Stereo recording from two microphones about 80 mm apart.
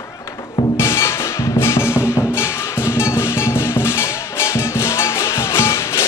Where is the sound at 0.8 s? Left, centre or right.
Left.